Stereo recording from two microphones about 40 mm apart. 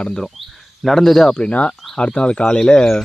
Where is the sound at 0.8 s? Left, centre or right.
Centre.